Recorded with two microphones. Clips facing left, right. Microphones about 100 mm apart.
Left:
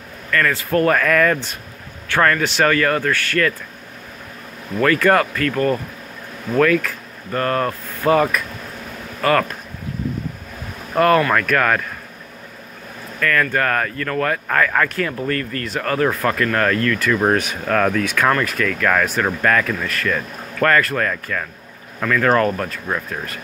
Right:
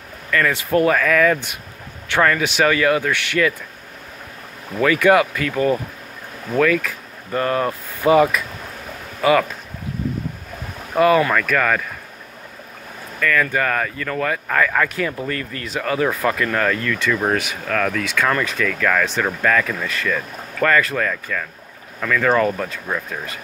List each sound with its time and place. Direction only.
0.5 s speech: 15° right (ahead or behind)
0.8 s speech: centre (ahead or behind)
4.7 s speech: 10° right (ahead or behind)
11.0 s speech: 5° right (ahead or behind)
13.2 s speech: 5° right (ahead or behind)
17.6 s speech: 10° left (ahead or behind)